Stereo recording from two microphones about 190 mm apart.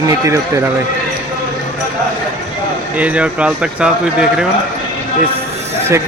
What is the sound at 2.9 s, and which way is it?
Speech, 5° right (ahead or behind).